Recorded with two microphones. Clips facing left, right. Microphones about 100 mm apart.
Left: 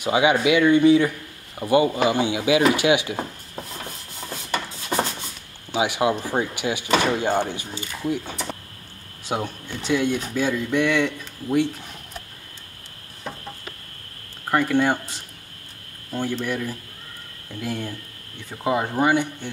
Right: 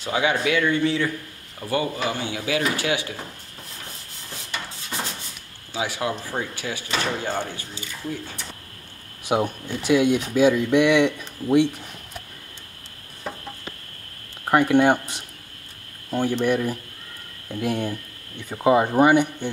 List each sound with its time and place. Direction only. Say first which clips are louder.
0.0 s speech: left 4 dB; 15° left (ahead or behind)
4.5 s a sound: left 7 dB; 55° left (ahead or behind)
5.7 s speech: left 5 dB; 20° left (ahead or behind)
9.2 s speech: right 4 dB; 15° right (ahead or behind)
14.5 s speech: right 3 dB; 20° right (ahead or behind)